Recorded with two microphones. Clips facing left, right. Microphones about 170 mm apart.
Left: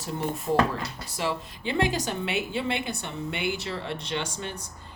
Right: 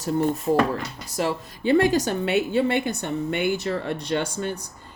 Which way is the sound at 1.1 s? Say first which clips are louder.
Right 5 dB; 45° right (ahead or behind).